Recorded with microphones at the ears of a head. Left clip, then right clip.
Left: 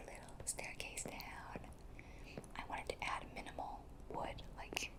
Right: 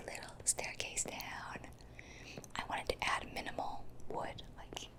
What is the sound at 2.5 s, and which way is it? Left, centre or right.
Whispering, right.